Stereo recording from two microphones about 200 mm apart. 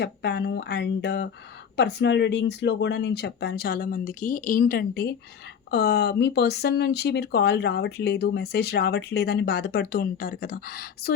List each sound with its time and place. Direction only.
0.0 s speech: 55° left (ahead or behind)